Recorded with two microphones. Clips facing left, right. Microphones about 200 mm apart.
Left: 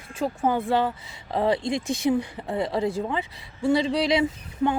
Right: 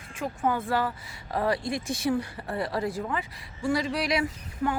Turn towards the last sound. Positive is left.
turn(degrees=25)  # may be behind; listen again after turning